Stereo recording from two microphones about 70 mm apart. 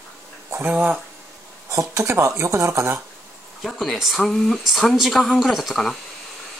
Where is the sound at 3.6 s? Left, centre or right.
Centre.